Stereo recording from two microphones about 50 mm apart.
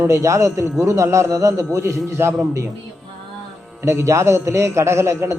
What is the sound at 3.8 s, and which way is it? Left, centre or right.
A man's voice, right.